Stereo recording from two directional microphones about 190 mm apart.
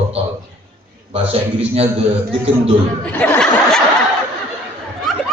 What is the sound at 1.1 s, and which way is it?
Speech, 30° right (ahead or behind).